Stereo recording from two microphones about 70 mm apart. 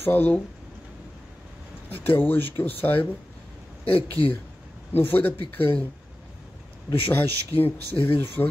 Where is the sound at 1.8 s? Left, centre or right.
Left.